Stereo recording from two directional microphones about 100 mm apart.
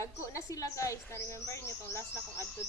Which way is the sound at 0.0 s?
35° left (ahead or behind).